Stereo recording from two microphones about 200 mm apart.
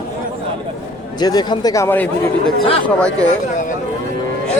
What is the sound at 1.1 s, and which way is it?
Speech, 20° left (ahead or behind).